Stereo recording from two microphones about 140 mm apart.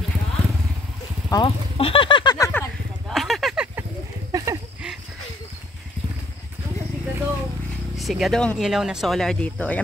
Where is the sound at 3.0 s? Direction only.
Centre (ahead or behind).